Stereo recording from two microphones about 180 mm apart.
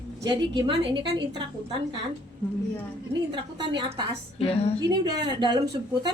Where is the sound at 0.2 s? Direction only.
20° right (ahead or behind).